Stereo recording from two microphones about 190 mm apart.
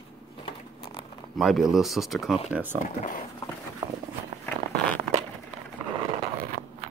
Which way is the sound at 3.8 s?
15° right (ahead or behind).